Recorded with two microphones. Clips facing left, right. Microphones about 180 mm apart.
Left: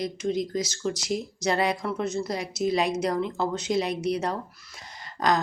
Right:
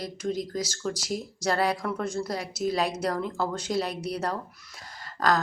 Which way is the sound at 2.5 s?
10° right (ahead or behind).